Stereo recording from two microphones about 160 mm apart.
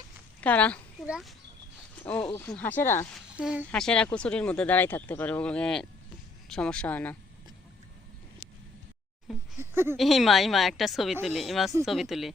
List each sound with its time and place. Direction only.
0.4 s speech: 10° left (ahead or behind)
1.0 s speech: 5° right (ahead or behind)
2.3 s speech: 15° left (ahead or behind)
3.3 s speech: 5° right (ahead or behind)
3.7 s speech: 5° left (ahead or behind)
9.6 s speech: 15° right (ahead or behind)
10.0 s a woman's voice: centre (ahead or behind)